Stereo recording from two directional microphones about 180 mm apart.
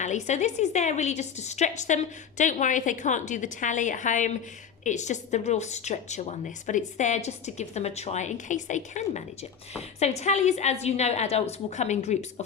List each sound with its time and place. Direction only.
0.0 s a woman's voice: 40° left (ahead or behind)